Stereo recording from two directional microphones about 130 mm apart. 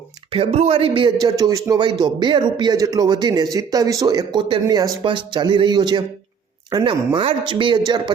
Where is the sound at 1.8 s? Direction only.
35° right (ahead or behind).